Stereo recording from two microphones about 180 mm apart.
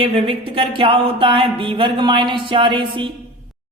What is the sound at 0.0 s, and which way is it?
Speech, 30° right (ahead or behind).